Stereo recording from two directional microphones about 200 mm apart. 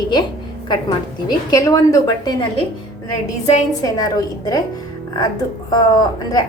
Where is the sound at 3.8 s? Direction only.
20° left (ahead or behind).